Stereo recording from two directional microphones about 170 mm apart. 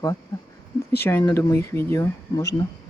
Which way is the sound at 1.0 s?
15° left (ahead or behind).